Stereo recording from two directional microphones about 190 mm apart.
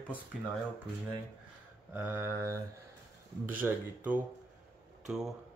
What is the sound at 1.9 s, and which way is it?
Mantra, 10° right (ahead or behind).